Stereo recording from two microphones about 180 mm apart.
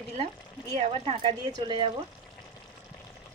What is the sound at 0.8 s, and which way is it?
Speech, 35° right (ahead or behind).